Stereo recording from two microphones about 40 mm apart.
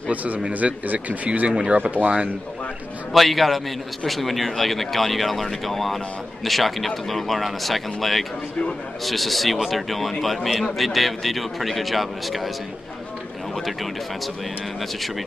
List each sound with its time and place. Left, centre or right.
0.1 s speech: right
3.1 s a man's voice: centre
14.8 s a man's voice: centre